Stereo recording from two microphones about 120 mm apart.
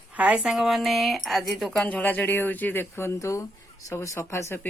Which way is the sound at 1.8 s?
15° left (ahead or behind).